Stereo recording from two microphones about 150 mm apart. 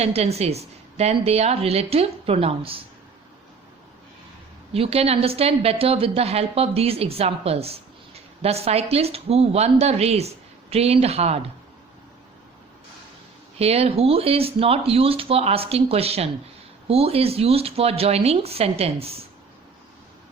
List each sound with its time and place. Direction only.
0.0 s a woman's voice: 45° right (ahead or behind)
4.7 s speech: 40° right (ahead or behind)
13.6 s speech: 40° right (ahead or behind)